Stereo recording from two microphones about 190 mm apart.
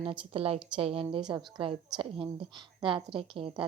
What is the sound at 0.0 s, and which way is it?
A woman's voice, 30° right (ahead or behind).